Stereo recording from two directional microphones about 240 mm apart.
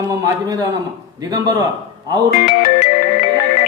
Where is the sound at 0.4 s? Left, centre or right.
Centre.